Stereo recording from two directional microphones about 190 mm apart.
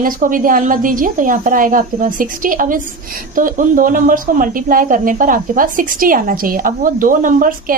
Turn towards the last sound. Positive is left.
turn(degrees=-45)  # may be behind; listen again after turning